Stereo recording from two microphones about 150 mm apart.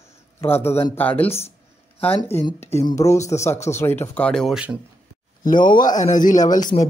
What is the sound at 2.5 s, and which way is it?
Speech, 15° left (ahead or behind).